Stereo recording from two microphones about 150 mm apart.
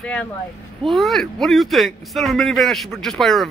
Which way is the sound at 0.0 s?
10° left (ahead or behind).